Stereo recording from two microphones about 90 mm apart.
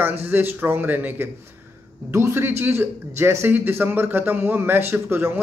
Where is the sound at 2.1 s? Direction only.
30° right (ahead or behind).